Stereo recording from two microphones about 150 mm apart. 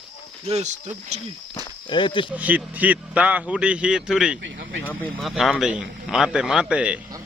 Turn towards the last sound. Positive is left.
turn(degrees=-5)  # may be behind; listen again after turning